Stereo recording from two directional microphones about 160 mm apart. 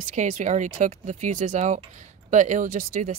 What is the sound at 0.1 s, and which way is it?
Speech, 50° right (ahead or behind).